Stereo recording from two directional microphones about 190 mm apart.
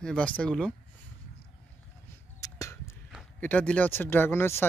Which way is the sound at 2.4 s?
15° left (ahead or behind).